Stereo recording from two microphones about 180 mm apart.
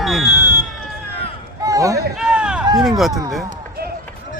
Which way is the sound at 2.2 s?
5° right (ahead or behind).